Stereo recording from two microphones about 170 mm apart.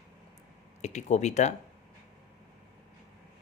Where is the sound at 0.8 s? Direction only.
40° left (ahead or behind).